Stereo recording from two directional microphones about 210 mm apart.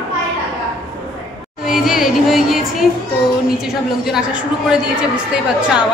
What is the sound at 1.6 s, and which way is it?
Music, centre (ahead or behind).